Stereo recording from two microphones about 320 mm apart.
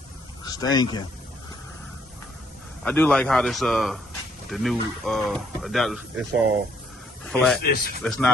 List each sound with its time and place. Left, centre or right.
0.4 s speech: centre
2.8 s speech: centre
7.3 s speech: centre
7.6 s speech: left
8.0 s speech: centre